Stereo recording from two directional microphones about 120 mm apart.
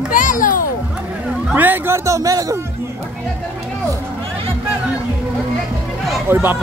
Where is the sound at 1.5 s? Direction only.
15° right (ahead or behind).